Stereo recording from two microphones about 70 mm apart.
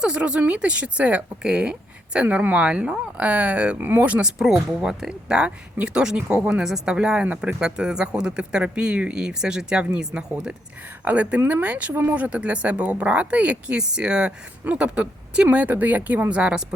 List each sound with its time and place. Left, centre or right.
0.0 s speech: centre
2.2 s speech: right
4.4 s speech: centre
11.0 s speech: right